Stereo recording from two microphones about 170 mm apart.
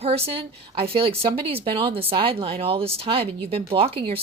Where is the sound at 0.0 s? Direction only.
35° right (ahead or behind).